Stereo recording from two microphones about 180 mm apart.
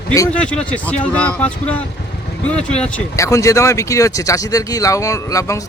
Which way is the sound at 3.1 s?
15° left (ahead or behind).